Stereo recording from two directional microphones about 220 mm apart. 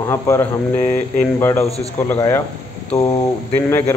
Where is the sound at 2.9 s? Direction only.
30° left (ahead or behind).